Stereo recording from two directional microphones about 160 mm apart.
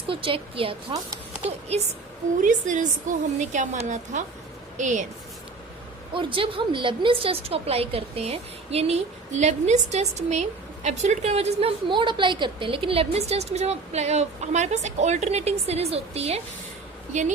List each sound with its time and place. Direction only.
0.1 s a woman's voice: 35° right (ahead or behind)
2.4 s a woman's voice: 50° right (ahead or behind)
6.1 s a woman's voice: 35° right (ahead or behind); by 17.3 s 50° right (ahead or behind)